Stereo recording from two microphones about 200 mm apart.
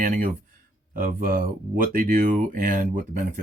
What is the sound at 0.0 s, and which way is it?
Speech, 45° right (ahead or behind).